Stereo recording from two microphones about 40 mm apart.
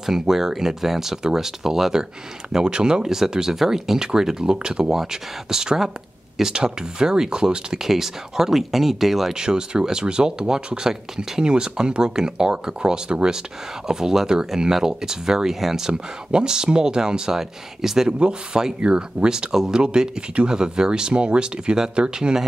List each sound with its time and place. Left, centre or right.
0.0 s speech: centre
9.3 s speech: centre
15.9 s speech: right